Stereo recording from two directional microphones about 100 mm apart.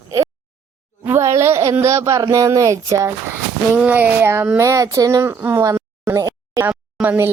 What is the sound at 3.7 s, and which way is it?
Speech, 15° right (ahead or behind).